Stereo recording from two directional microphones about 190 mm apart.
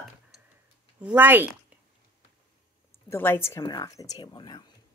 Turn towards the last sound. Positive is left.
turn(degrees=25)  # may be behind; listen again after turning